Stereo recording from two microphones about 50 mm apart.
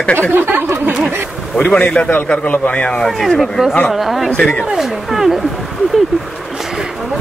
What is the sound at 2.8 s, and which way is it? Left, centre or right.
Speech, centre.